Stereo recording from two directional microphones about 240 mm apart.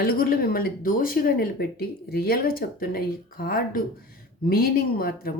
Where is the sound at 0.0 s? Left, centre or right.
Left.